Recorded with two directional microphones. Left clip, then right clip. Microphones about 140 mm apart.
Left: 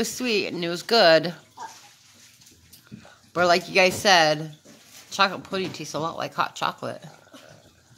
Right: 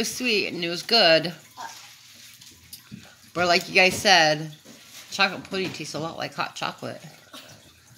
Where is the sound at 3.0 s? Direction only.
15° left (ahead or behind).